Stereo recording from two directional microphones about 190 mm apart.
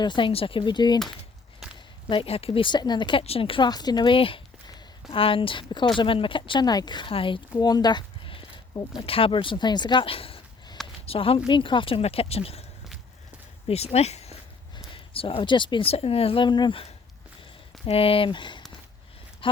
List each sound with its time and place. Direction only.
0.0 s speech: 25° left (ahead or behind)
2.0 s speech: 30° left (ahead or behind)
7.5 s a sound: 20° left (ahead or behind)
9.0 s speech: 30° left (ahead or behind)
13.7 s speech: 35° left (ahead or behind)